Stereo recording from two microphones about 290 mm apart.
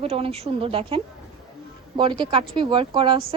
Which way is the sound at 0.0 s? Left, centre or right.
Centre.